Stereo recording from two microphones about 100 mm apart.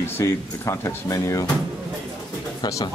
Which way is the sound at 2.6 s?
35° left (ahead or behind).